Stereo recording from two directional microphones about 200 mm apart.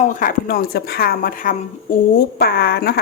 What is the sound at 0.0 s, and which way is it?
A woman's voice, 45° left (ahead or behind).